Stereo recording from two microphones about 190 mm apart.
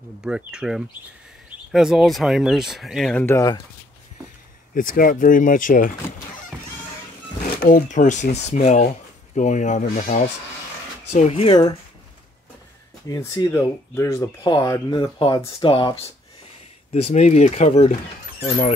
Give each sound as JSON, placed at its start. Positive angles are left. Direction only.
{"t": 0.2, "sound": "speech", "side_deg": -5}
{"t": 4.7, "sound": "speech", "side_deg": 45}
{"t": 7.6, "sound": "speech", "side_deg": 45}
{"t": 13.1, "sound": "speech", "side_deg": 15}